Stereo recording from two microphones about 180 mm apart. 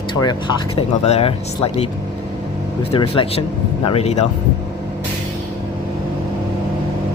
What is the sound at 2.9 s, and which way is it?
Speech, 30° left (ahead or behind).